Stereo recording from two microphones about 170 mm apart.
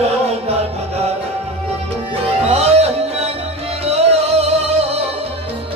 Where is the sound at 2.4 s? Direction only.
35° right (ahead or behind).